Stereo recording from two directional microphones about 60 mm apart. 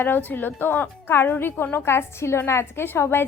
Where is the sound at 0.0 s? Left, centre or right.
Left.